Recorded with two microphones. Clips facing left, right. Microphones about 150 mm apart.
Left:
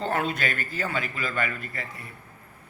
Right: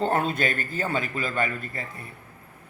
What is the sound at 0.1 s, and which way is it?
A man's voice, 35° right (ahead or behind).